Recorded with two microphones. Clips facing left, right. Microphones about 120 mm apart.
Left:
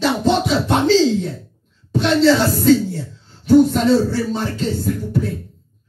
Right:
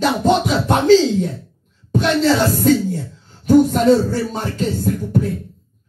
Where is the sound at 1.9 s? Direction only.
50° right (ahead or behind).